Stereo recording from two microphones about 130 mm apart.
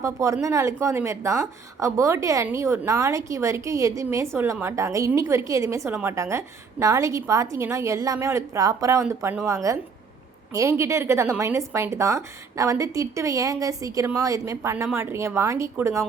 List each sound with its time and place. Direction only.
0.0 s a woman's voice: 25° right (ahead or behind)